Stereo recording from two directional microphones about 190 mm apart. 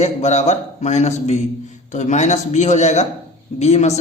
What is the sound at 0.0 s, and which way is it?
A man's voice, 35° left (ahead or behind).